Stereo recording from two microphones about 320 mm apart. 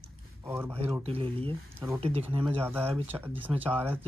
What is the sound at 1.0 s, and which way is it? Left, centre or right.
Speech, centre.